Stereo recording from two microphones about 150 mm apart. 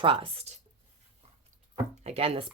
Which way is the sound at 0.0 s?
35° right (ahead or behind).